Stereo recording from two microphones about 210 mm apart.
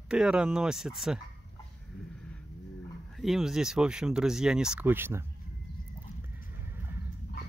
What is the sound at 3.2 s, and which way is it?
Speech, centre (ahead or behind).